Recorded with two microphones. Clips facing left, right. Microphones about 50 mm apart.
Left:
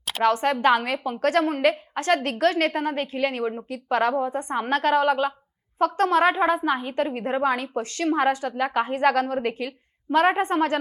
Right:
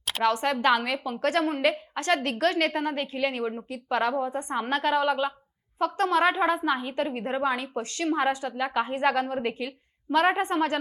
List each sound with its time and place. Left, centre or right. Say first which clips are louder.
0.2 s a woman's voice: left 4 dB; left
4.2 s a woman's voice: left 3 dB; left
4.7 s a woman's voice: left 4 dB; left